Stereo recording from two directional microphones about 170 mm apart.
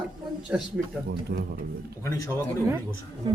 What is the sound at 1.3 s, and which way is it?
Speech, 75° right (ahead or behind).